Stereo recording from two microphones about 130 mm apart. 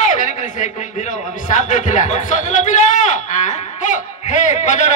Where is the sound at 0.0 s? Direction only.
75° left (ahead or behind).